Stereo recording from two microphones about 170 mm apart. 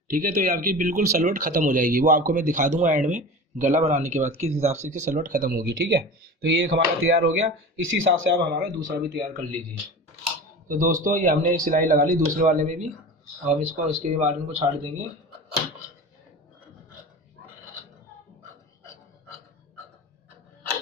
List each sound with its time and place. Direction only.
0.1 s speech: 55° right (ahead or behind); by 8.6 s 75° right (ahead or behind)
8.6 s speech: 55° right (ahead or behind)
10.7 s speech: 50° right (ahead or behind)